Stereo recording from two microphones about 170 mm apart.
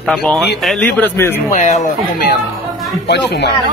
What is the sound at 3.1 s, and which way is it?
Speech, 85° left.